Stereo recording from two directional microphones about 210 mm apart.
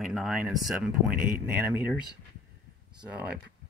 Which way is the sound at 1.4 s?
10° right (ahead or behind).